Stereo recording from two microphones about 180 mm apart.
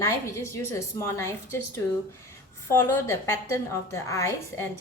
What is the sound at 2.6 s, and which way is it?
A woman's voice, 15° left (ahead or behind).